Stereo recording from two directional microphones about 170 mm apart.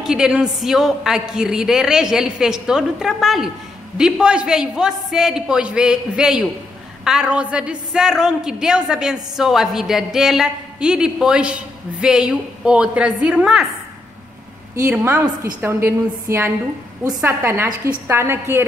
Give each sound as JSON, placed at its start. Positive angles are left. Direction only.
{"t": 0.0, "sound": "a woman's voice", "side_deg": -5}
{"t": 14.8, "sound": "a woman's voice", "side_deg": -15}